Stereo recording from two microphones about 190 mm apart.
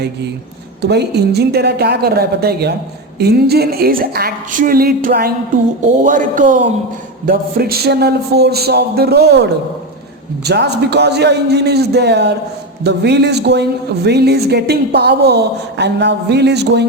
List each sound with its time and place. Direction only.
0.8 s a woman's voice: 60° right (ahead or behind)